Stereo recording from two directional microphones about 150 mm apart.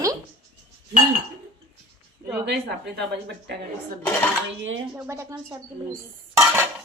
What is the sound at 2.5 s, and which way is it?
Speech, 90° right.